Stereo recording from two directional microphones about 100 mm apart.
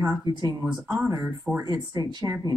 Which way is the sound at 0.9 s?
30° right (ahead or behind).